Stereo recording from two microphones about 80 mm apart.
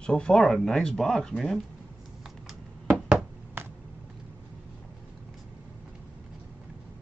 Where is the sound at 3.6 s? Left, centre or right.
Right.